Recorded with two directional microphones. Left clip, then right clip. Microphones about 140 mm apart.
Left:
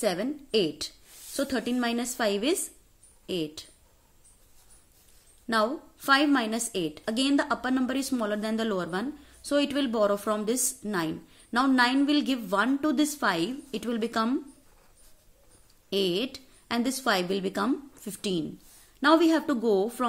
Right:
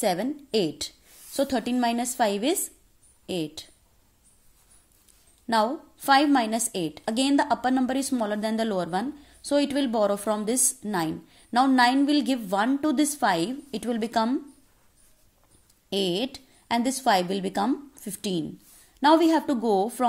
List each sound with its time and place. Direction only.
0.0 s a woman's voice: 25° right (ahead or behind)
5.5 s a woman's voice: 25° right (ahead or behind)
15.9 s a woman's voice: 20° right (ahead or behind)